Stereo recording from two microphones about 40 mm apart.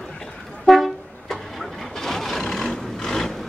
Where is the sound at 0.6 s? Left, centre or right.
Centre.